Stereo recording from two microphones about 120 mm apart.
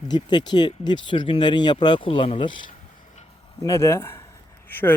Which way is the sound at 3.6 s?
25° left (ahead or behind).